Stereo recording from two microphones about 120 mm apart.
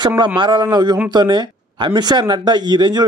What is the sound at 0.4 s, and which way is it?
Speech, 40° right (ahead or behind).